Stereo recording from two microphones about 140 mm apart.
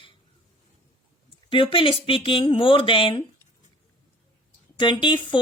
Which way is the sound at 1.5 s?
40° left (ahead or behind).